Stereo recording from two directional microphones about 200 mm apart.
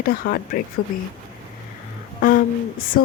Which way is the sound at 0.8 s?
90° left.